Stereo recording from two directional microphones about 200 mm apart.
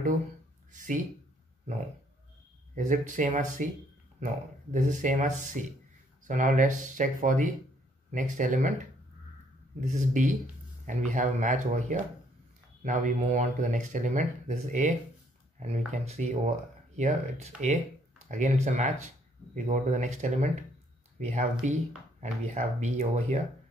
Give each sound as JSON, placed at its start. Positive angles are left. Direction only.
{"t": 0.7, "sound": "speech", "side_deg": -40}
{"t": 2.7, "sound": "speech", "side_deg": -40}
{"t": 9.8, "sound": "speech", "side_deg": -40}
{"t": 18.3, "sound": "speech", "side_deg": -35}